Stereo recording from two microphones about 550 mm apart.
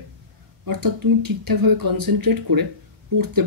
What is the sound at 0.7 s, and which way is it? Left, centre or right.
Speech, right.